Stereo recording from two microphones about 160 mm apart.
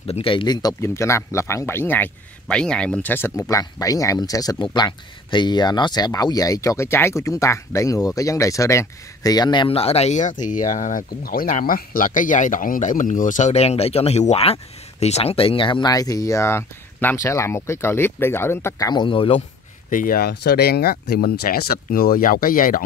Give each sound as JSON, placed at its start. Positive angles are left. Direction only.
{"t": 0.0, "sound": "speech", "side_deg": 35}
{"t": 19.9, "sound": "speech", "side_deg": 60}